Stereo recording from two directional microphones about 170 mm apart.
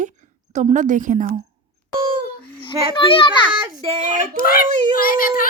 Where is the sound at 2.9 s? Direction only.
30° left (ahead or behind).